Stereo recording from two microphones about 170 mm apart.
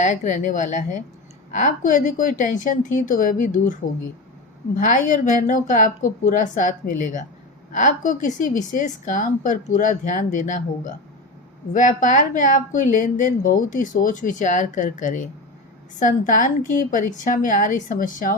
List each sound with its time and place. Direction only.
0.0 s speech: 45° left (ahead or behind)
4.8 s speech: 50° left (ahead or behind)